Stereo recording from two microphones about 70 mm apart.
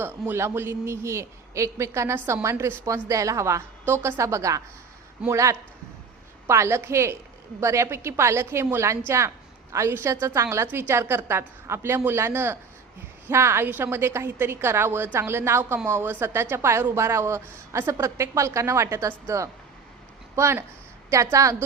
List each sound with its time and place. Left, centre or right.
0.3 s a woman's voice: right